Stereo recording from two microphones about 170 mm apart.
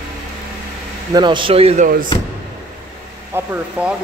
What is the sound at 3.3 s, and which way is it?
Speech, 15° right (ahead or behind).